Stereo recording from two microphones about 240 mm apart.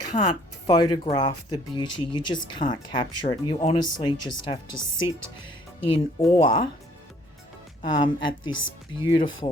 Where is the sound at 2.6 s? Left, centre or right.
Left.